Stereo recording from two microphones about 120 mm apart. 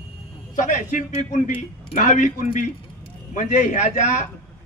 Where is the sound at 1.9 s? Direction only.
90° left.